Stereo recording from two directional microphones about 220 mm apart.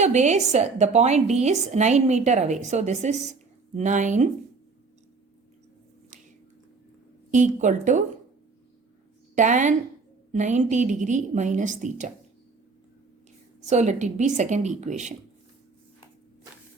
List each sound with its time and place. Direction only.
0.0 s a woman's voice: 30° right (ahead or behind)
7.3 s a woman's voice: 35° right (ahead or behind)
9.3 s a woman's voice: 35° right (ahead or behind)
13.6 s a woman's voice: 30° right (ahead or behind)